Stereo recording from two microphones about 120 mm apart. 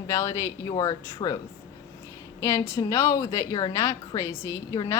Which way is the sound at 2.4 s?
25° left (ahead or behind).